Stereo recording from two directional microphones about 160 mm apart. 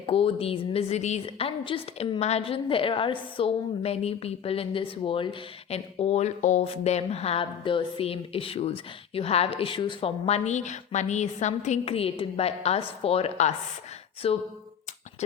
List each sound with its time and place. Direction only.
0.0 s speech: 35° left (ahead or behind)